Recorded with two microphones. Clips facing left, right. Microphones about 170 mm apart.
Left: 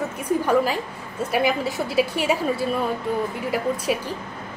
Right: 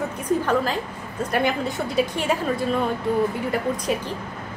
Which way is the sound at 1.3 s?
5° left (ahead or behind).